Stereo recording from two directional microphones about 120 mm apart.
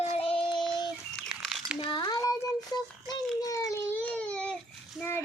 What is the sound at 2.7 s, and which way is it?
Baby cry, 30° left (ahead or behind).